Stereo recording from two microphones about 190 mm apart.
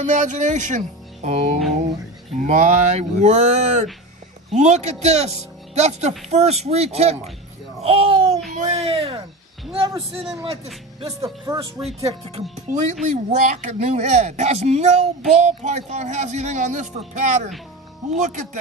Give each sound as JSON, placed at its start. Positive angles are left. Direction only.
{"t": 0.0, "sound": "speech", "side_deg": -40}
{"t": 7.8, "sound": "a sound", "side_deg": -30}
{"t": 8.5, "sound": "speech", "side_deg": -35}
{"t": 10.3, "sound": "speech", "side_deg": -30}